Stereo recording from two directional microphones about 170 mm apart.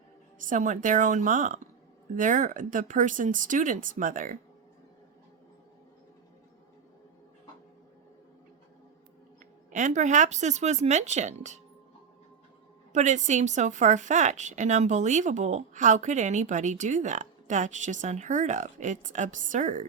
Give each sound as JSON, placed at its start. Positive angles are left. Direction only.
{"t": 0.3, "sound": "a woman's voice", "side_deg": -50}
{"t": 9.7, "sound": "a woman's voice", "side_deg": -45}
{"t": 12.9, "sound": "a woman's voice", "side_deg": -45}